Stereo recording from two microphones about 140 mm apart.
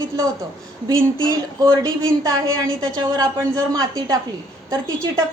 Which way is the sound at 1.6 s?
20° right (ahead or behind).